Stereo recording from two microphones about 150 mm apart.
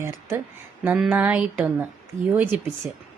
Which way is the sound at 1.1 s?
10° right (ahead or behind).